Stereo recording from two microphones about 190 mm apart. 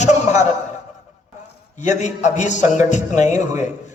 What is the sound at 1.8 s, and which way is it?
A man's voice, 40° left (ahead or behind).